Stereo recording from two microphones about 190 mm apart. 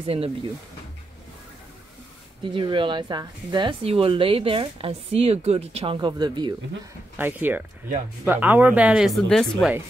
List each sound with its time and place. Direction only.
0.0 s speech: 30° right (ahead or behind)
2.5 s a woman's voice: 25° right (ahead or behind)
7.2 s speech: 10° right (ahead or behind)